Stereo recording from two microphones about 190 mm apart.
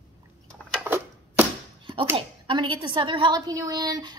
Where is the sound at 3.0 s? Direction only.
25° right (ahead or behind).